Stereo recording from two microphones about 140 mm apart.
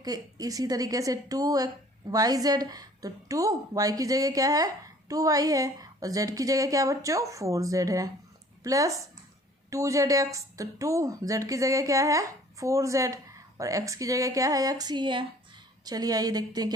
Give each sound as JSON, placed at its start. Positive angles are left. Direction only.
{"t": 0.0, "sound": "speech", "side_deg": -25}